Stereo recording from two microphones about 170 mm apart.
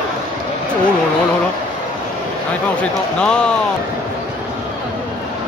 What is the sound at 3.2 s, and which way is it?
Speech, 5° left (ahead or behind).